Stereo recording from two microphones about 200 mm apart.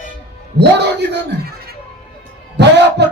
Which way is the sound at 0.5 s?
60° right (ahead or behind).